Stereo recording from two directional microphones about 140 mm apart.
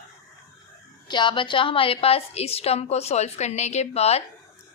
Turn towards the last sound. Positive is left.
turn(degrees=50)  # may be behind; listen again after turning